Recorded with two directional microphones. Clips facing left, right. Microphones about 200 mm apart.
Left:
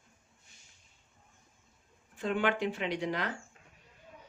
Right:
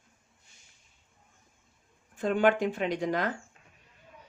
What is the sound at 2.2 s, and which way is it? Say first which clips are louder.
Speech: right 6 dB; 45° right (ahead or behind).